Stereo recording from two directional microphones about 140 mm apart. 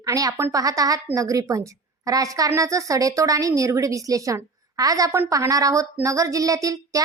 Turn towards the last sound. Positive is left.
turn(degrees=-25)  # may be behind; listen again after turning